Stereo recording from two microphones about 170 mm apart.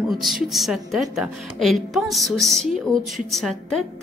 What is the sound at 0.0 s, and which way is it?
Speech, centre (ahead or behind).